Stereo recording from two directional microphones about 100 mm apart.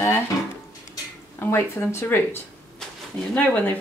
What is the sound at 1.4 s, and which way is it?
Speech, 25° left (ahead or behind).